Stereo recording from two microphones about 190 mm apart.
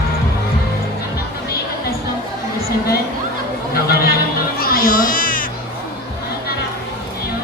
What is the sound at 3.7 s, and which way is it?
Chatter, 55° left (ahead or behind).